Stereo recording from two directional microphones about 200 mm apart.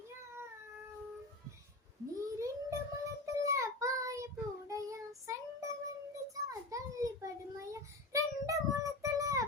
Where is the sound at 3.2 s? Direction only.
15° right (ahead or behind).